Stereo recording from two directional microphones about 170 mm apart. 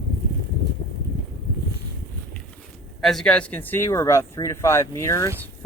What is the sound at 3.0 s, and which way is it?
Speech, centre (ahead or behind).